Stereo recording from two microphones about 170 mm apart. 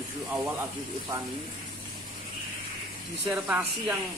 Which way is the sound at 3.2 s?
10° right (ahead or behind).